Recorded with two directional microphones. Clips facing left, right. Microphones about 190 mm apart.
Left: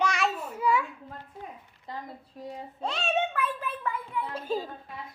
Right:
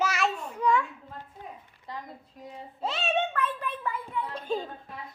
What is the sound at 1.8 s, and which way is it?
Speech, 30° left (ahead or behind).